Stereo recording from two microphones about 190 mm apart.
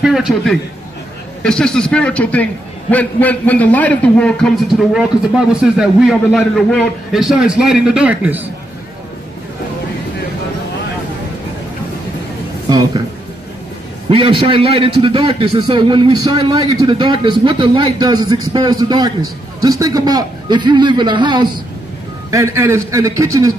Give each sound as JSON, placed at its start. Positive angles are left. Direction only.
{"t": 0.0, "sound": "a man's voice", "side_deg": 0}
{"t": 12.6, "sound": "a sound", "side_deg": -20}
{"t": 14.0, "sound": "a man's voice", "side_deg": -30}